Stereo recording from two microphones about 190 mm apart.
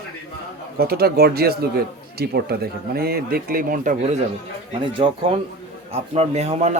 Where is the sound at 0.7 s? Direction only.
55° right (ahead or behind).